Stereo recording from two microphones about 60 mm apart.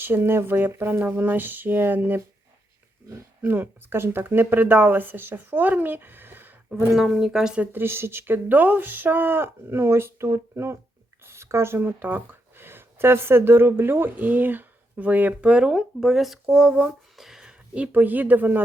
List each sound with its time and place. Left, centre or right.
0.0 s speech: right
3.4 s speech: right
6.9 s speech: centre
7.6 s speech: right; by 17.5 s centre
17.7 s speech: right